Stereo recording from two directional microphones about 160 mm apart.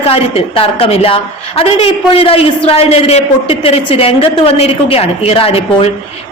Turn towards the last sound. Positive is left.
turn(degrees=35)  # may be behind; listen again after turning